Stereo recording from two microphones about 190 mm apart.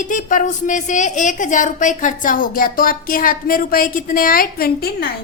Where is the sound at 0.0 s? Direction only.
45° left (ahead or behind).